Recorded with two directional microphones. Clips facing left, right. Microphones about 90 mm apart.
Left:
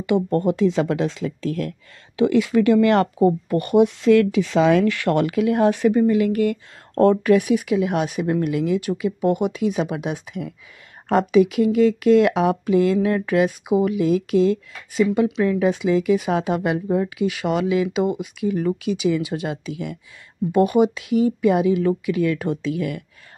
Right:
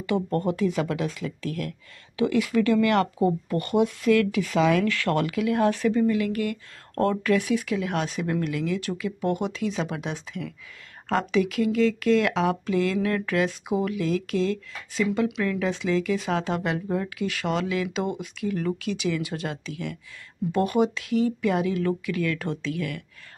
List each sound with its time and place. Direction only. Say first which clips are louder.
0.0 s speech: left 6 dB; 20° left (ahead or behind)
4.8 s speech: left 5 dB; 20° left (ahead or behind)